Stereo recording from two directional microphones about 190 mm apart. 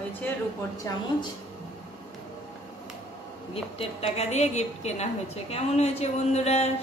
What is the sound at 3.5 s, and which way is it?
A woman's voice, 30° left (ahead or behind).